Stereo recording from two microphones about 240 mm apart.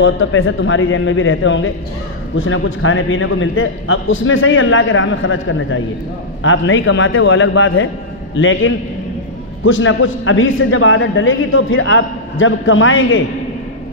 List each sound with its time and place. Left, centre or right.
0.0 s a man's voice: left